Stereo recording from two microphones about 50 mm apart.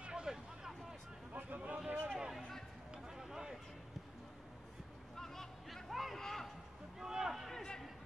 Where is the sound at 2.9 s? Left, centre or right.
Centre.